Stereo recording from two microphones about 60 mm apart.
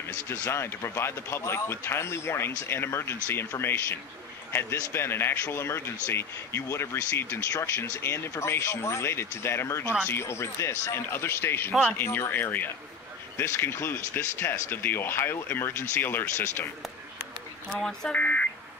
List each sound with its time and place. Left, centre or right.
0.3 s speech: left
7.5 s speech: left
8.0 s speech: left
17.7 s speech: centre
18.1 s speech: left